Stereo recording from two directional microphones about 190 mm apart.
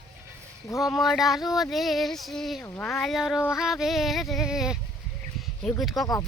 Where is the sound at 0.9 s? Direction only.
Centre (ahead or behind).